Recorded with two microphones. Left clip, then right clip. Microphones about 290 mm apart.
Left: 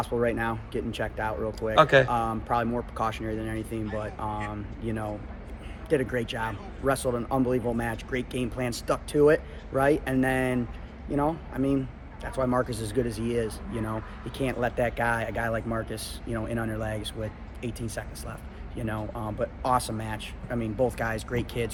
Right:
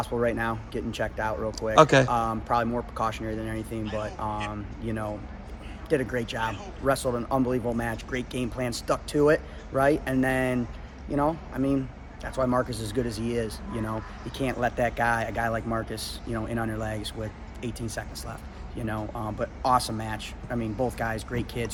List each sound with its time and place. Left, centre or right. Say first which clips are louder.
0.0 s speech: even; centre
1.7 s speech: right 1 dB; right
2.0 s speech: right 1 dB; centre